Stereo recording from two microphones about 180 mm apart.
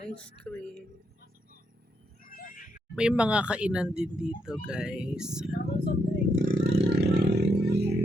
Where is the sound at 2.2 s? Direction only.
50° left (ahead or behind).